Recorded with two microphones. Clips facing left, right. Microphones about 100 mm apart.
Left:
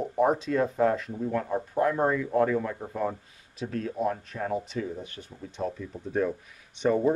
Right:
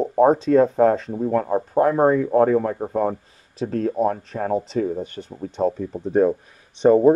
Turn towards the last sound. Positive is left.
turn(degrees=-35)  # may be behind; listen again after turning